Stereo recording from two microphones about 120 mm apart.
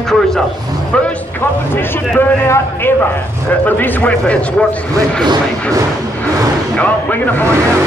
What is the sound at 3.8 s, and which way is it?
Speech, 15° left (ahead or behind).